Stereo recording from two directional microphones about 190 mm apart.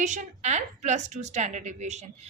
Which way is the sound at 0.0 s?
40° right (ahead or behind).